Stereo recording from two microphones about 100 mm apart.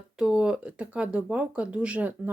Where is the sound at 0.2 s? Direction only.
10° right (ahead or behind).